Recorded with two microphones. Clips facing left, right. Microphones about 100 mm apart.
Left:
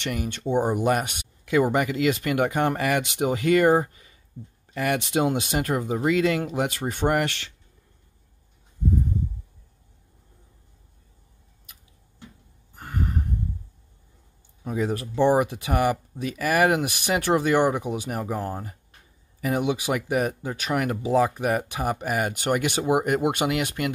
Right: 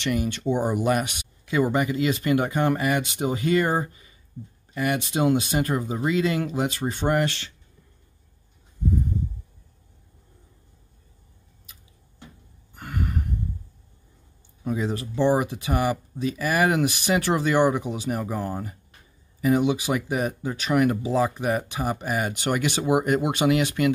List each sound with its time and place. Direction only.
0.0 s speech: 50° left (ahead or behind)
1.4 s speech: 70° left (ahead or behind)
4.7 s speech: 70° left (ahead or behind)
12.7 s a sound: 35° left (ahead or behind)
14.8 s speech: 55° left (ahead or behind)
18.2 s speech: 40° left (ahead or behind)
19.4 s speech: 55° left (ahead or behind)